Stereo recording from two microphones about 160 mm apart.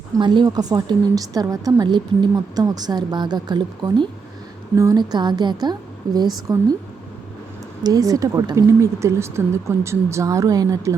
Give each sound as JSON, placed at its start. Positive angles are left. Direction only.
{"t": 0.2, "sound": "a woman's voice", "side_deg": -30}
{"t": 7.9, "sound": "a woman's voice", "side_deg": -20}